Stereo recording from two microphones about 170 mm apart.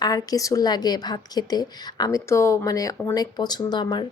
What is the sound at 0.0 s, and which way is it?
Speech, 20° left (ahead or behind).